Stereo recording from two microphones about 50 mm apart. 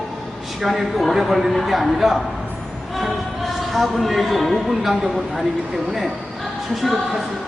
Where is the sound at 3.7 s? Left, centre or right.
Centre.